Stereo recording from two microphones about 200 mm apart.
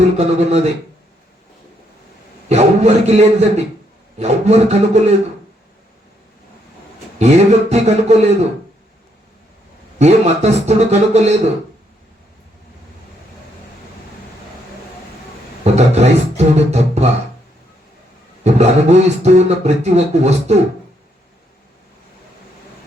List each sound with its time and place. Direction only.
0.2 s speech: 35° right (ahead or behind)
2.5 s speech: 35° right (ahead or behind)
7.2 s speech: 35° right (ahead or behind)
10.0 s speech: 35° right (ahead or behind)
15.6 s beatboxing: 35° right (ahead or behind)
18.4 s speech: 35° right (ahead or behind)